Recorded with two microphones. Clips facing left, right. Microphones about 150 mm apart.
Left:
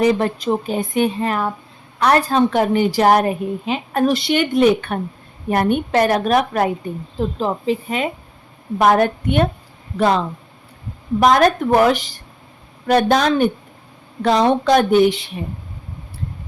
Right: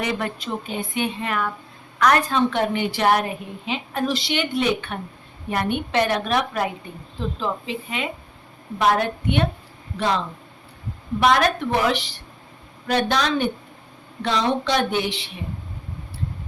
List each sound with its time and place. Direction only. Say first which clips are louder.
0.0 s a woman's voice: left 9 dB; 35° left (ahead or behind)
11.2 s a woman's voice: left 5 dB; 45° left (ahead or behind)